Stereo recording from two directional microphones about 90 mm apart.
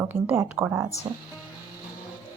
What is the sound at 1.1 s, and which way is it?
Speech, 85° right.